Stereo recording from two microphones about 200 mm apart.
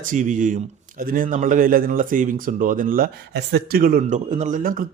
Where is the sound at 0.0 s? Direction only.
40° right (ahead or behind).